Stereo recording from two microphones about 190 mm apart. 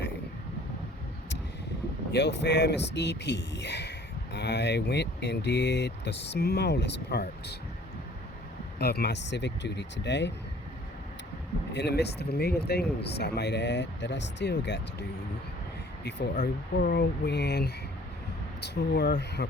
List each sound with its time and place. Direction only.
2.1 s speech: 65° left (ahead or behind)
8.8 s speech: 55° left (ahead or behind)
11.7 s speech: 60° left (ahead or behind)
16.4 s speech: 60° left (ahead or behind)